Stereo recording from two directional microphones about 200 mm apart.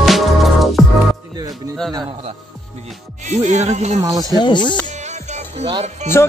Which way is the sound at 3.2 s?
35° right (ahead or behind).